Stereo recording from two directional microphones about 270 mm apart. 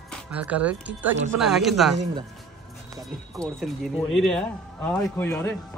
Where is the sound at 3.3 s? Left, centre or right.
Centre.